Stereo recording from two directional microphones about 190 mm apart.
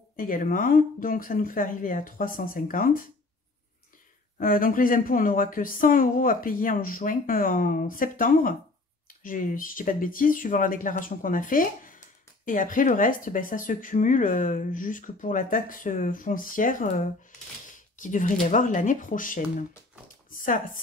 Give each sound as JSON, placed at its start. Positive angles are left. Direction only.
{"t": 0.1, "sound": "speech", "side_deg": 45}
{"t": 4.4, "sound": "speech", "side_deg": 45}
{"t": 18.0, "sound": "speech", "side_deg": 40}